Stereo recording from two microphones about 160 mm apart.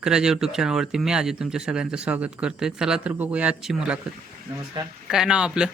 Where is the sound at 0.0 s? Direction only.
5° right (ahead or behind).